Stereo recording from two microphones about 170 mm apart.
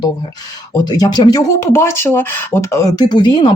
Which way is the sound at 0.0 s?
25° left (ahead or behind).